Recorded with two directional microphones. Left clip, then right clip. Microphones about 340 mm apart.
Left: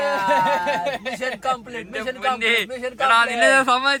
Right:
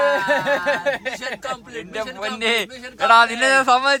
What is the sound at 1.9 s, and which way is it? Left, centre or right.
A man's voice, centre.